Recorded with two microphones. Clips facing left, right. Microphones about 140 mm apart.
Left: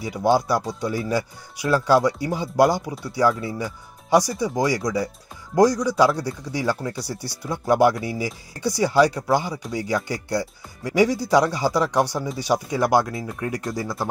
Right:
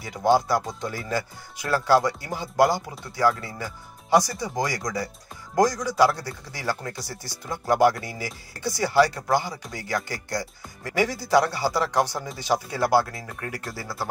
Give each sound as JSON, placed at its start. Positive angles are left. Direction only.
{"t": 0.0, "sound": "speech", "side_deg": 15}